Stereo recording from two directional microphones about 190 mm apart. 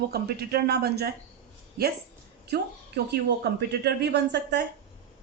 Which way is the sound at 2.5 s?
60° right (ahead or behind).